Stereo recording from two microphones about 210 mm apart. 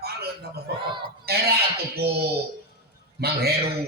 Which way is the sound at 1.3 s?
50° right (ahead or behind).